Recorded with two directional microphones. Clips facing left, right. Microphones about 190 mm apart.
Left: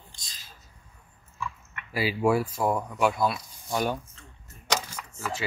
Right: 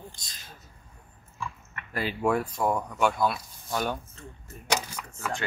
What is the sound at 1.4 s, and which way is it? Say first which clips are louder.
Dog: left 1 dB; 35° right (ahead or behind).